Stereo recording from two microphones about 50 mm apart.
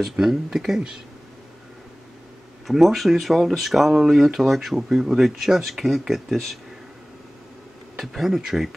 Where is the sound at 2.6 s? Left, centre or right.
Centre.